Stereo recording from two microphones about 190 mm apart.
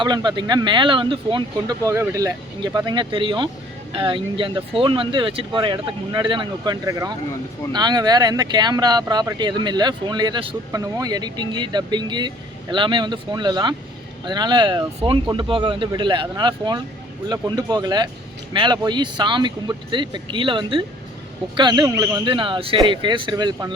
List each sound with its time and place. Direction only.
0.0 s speech: 25° right (ahead or behind)